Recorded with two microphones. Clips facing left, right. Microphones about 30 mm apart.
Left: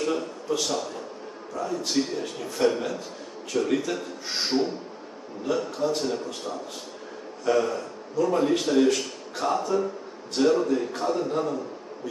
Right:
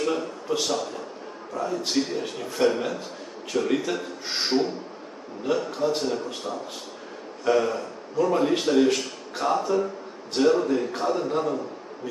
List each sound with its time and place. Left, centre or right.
0.0 s a man's voice: centre
7.4 s a man's voice: centre